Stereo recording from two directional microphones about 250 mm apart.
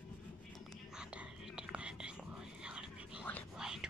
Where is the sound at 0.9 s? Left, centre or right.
Centre.